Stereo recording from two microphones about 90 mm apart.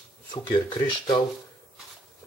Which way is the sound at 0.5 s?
60° left (ahead or behind).